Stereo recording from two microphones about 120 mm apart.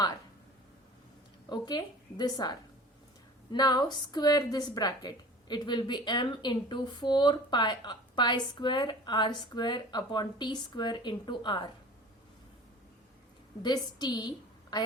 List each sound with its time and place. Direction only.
1.5 s a woman's voice: 35° left (ahead or behind)
13.6 s a woman's voice: 35° left (ahead or behind)